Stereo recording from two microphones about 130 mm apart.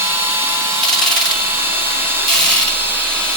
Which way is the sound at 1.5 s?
15° right (ahead or behind).